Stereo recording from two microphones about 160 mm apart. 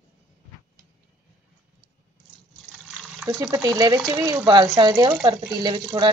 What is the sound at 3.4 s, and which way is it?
Speech, 20° right (ahead or behind).